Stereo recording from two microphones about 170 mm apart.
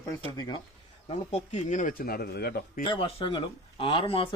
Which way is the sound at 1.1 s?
45° left (ahead or behind).